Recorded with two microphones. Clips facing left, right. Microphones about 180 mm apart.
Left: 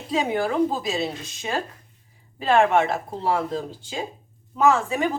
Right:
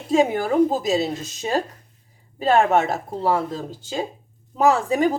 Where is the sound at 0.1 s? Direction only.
45° right (ahead or behind).